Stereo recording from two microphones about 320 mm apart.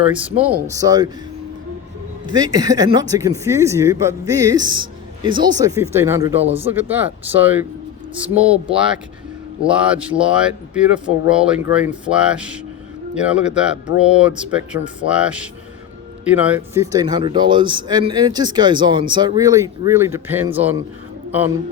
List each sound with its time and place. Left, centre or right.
0.0 s speech: centre
2.3 s speech: centre